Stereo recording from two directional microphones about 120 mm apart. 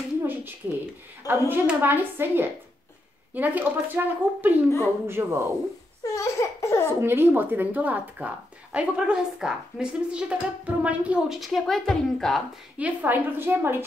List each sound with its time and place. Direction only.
0.2 s a sound: 15° right (ahead or behind)
1.5 s a woman's voice: 15° right (ahead or behind)
6.1 s laughter: 25° left (ahead or behind)
7.0 s a woman's voice: 20° right (ahead or behind); by 12.4 s 5° left (ahead or behind)
12.7 s a woman's voice: 15° right (ahead or behind)